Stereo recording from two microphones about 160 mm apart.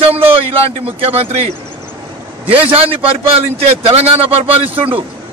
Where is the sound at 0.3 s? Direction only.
35° right (ahead or behind).